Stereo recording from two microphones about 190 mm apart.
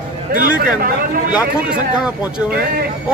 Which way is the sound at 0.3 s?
50° right (ahead or behind).